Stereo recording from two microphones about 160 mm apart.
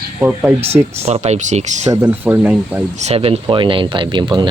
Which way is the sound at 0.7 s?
40° right (ahead or behind).